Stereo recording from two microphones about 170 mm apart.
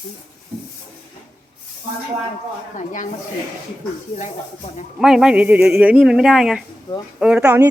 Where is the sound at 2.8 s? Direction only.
50° left (ahead or behind).